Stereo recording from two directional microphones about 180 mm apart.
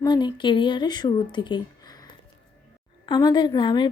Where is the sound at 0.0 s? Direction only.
25° left (ahead or behind).